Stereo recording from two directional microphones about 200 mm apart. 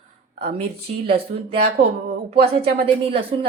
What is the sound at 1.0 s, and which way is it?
A woman's voice, 30° right (ahead or behind).